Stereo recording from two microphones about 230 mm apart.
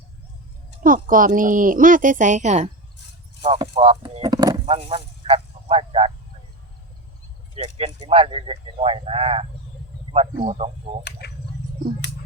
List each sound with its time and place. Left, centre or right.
0.8 s a woman's voice: right
7.8 s speech: right
11.2 s bird: left